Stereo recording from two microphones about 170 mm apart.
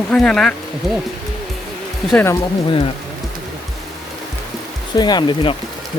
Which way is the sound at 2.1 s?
15° left (ahead or behind).